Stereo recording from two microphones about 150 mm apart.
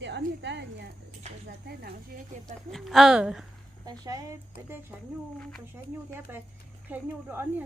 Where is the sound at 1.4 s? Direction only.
90° right.